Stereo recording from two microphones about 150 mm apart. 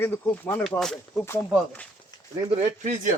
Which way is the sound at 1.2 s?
15° left (ahead or behind).